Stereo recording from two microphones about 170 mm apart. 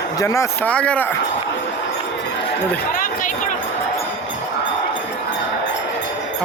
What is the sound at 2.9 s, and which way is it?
Speech, 55° left (ahead or behind).